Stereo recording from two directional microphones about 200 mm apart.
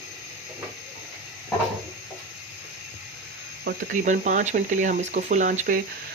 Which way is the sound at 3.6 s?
50° right (ahead or behind).